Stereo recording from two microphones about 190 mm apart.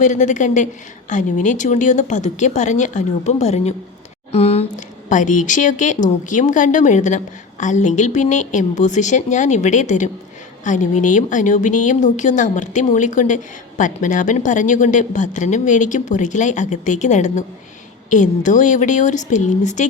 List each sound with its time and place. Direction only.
0.0 s speech: 40° left (ahead or behind)